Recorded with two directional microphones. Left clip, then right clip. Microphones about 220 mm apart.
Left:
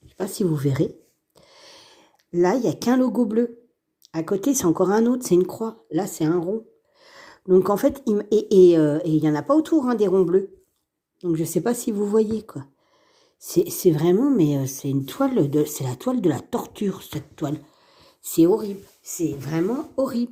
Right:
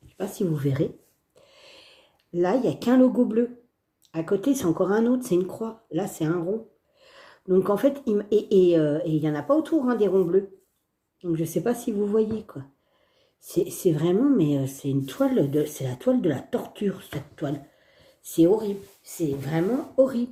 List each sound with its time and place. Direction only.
0.2 s speech: 45° left (ahead or behind)
1.4 s a sound: 45° left (ahead or behind)
4.1 s speech: 45° left (ahead or behind)